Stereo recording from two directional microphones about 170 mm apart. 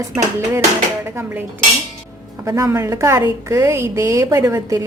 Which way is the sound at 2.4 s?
20° right (ahead or behind).